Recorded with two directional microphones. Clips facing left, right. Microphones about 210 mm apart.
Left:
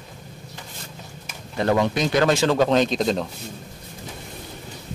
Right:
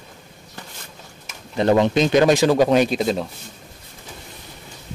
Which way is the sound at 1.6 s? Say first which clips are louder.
Right 4 dB; 25° right (ahead or behind).